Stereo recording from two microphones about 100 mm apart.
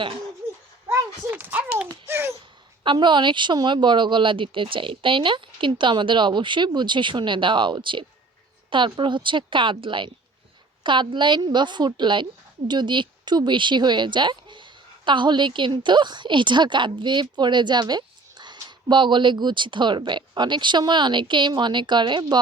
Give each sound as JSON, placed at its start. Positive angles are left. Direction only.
{"t": 0.9, "sound": "a child's voice", "side_deg": -20}
{"t": 2.0, "sound": "a sound", "side_deg": -25}
{"t": 2.8, "sound": "a woman's voice", "side_deg": -50}